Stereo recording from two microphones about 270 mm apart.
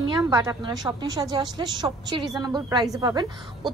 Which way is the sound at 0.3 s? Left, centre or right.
Centre.